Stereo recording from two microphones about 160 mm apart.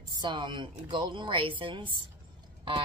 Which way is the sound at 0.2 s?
30° right (ahead or behind).